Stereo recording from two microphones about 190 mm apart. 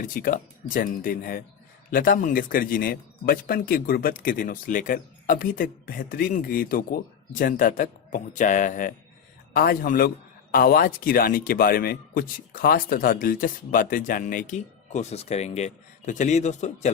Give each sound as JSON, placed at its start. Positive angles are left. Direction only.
{"t": 0.1, "sound": "a man's voice", "side_deg": 50}